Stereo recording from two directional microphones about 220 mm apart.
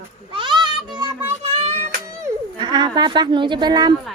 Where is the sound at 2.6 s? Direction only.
20° right (ahead or behind).